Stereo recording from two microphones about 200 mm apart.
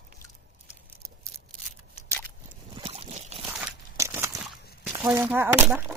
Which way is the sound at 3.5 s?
5° right (ahead or behind).